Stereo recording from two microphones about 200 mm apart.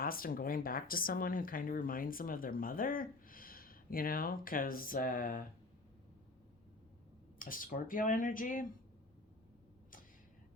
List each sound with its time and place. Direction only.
0.0 s speech: 45° left (ahead or behind)
7.3 s speech: 45° left (ahead or behind)